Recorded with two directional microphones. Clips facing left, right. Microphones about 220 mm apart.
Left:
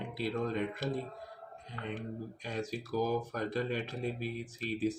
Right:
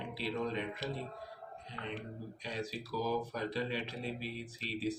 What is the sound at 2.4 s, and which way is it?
Speech, 45° left (ahead or behind).